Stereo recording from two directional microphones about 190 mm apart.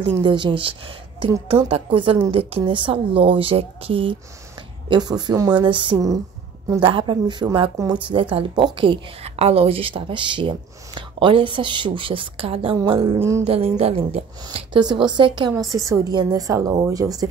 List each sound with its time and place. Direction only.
0.2 s a woman's voice: 25° right (ahead or behind)
13.0 s a woman's voice: 15° right (ahead or behind)
13.5 s a woman's voice: 30° right (ahead or behind)